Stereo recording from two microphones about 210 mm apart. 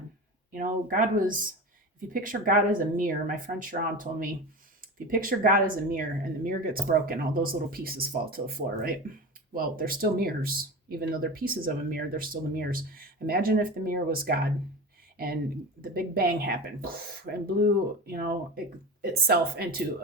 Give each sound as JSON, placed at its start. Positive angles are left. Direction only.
{"t": 0.5, "sound": "speech", "side_deg": -40}
{"t": 15.8, "sound": "speech", "side_deg": -45}